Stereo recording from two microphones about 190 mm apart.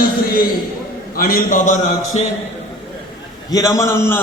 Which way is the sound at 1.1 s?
50° left (ahead or behind).